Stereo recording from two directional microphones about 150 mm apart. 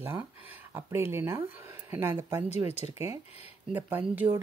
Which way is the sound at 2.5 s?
45° left (ahead or behind).